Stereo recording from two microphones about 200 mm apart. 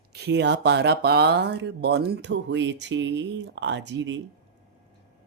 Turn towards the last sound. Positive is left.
turn(degrees=-65)  # may be behind; listen again after turning